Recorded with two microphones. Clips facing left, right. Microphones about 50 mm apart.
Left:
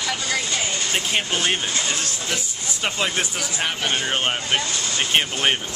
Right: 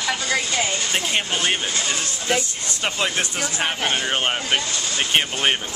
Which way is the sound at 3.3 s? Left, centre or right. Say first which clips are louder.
Right 2 dB; right.